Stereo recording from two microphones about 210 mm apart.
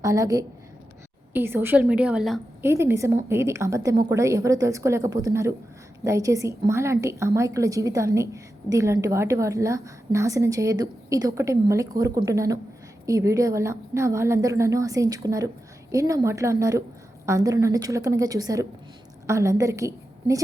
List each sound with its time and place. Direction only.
0.0 s a woman's voice: 15° right (ahead or behind)
2.6 s a woman's voice: 10° right (ahead or behind)